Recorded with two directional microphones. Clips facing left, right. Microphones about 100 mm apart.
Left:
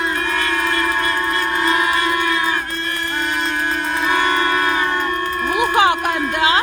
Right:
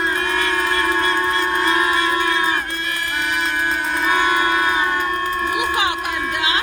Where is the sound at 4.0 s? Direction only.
5° right (ahead or behind).